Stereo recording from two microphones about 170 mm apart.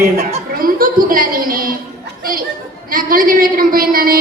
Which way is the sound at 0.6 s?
55° right (ahead or behind).